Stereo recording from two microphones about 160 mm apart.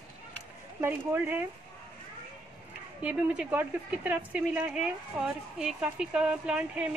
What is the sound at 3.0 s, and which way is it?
A woman's voice, 10° right (ahead or behind).